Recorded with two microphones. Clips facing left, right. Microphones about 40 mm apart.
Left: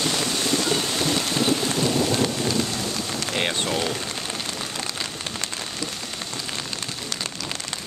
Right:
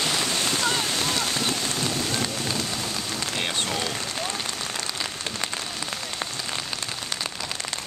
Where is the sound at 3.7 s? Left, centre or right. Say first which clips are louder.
Left 3 dB; centre.